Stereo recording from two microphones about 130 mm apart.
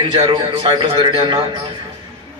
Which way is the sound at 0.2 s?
45° right (ahead or behind).